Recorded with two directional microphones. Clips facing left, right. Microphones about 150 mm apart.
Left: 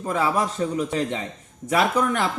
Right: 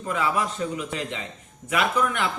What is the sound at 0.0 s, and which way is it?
Speech, 35° left (ahead or behind).